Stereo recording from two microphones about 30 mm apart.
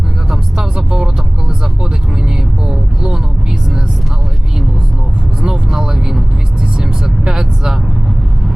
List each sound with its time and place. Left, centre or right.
0.3 s vehicle: centre
5.5 s vehicle: right